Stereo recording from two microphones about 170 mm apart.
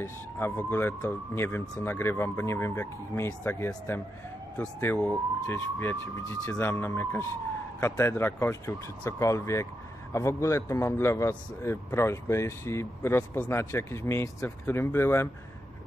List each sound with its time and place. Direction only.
0.0 s a man's voice: 10° left (ahead or behind)